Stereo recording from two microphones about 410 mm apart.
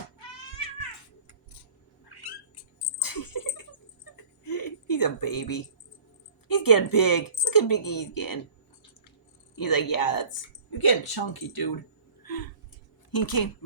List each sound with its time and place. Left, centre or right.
2.0 s cat: left
3.0 s a sound: left
6.5 s speech: left
9.6 s speech: left
12.2 s a sound: left
13.1 s speech: left